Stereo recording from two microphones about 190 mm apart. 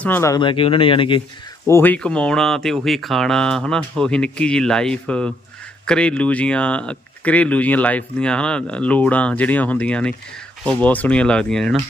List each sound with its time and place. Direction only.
0.0 s speech: 10° left (ahead or behind)
1.6 s speech: 10° left (ahead or behind)